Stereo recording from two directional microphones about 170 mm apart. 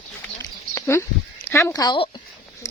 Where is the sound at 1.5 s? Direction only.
15° left (ahead or behind).